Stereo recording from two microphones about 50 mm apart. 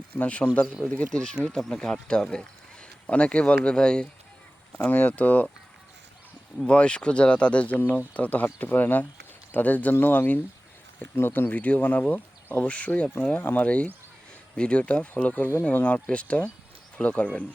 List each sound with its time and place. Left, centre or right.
0.2 s speech: left
1.5 s speech: centre
4.9 s speech: left
6.7 s speech: left